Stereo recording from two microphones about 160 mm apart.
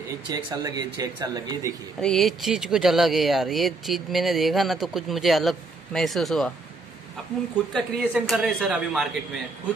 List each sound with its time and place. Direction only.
0.3 s speech: 25° right (ahead or behind)
2.0 s speech: 5° left (ahead or behind)
8.0 s speech: 5° right (ahead or behind)